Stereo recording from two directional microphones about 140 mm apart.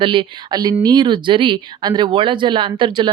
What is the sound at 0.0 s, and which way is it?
Speech, 35° right (ahead or behind).